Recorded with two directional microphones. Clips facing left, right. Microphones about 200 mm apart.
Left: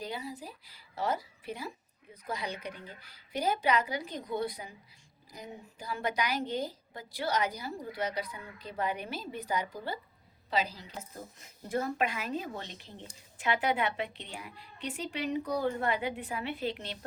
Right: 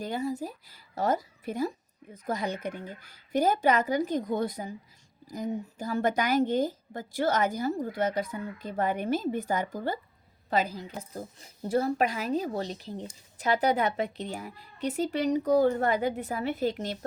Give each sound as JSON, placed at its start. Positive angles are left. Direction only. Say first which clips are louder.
{"t": 0.0, "sound": "a woman's voice", "louder": "right 8 dB", "side_deg": -45}
{"t": 11.1, "sound": "speech", "louder": "right 7 dB", "side_deg": -35}